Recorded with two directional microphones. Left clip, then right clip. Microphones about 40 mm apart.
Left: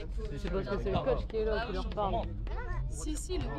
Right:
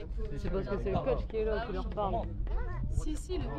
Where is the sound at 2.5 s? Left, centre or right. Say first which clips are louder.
Left 2 dB; centre.